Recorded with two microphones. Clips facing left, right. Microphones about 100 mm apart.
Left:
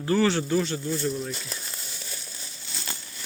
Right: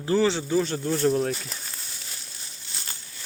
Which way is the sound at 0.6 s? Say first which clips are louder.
Right 4 dB; 50° right (ahead or behind).